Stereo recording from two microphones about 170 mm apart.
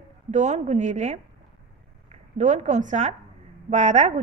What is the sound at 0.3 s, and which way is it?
A woman's voice, 45° right (ahead or behind).